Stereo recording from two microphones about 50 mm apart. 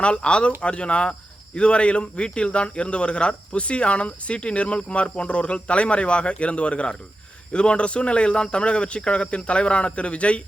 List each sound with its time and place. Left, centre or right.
0.0 s speech: left